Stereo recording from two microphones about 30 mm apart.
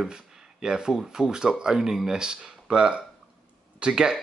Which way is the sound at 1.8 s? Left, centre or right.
Centre.